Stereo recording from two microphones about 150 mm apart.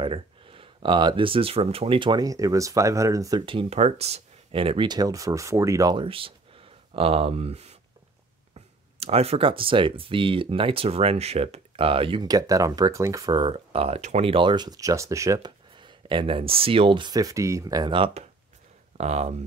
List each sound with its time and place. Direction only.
0.0 s speech: 35° right (ahead or behind)
3.4 s speech: 40° right (ahead or behind); by 6.0 s 25° right (ahead or behind)
6.0 s speech: 35° right (ahead or behind)
18.9 s speech: 45° right (ahead or behind)